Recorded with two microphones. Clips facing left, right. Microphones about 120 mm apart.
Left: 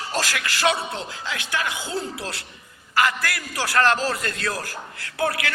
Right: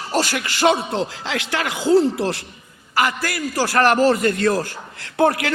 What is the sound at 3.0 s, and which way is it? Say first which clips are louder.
A man's voice: right 2 dB; 30° right (ahead or behind).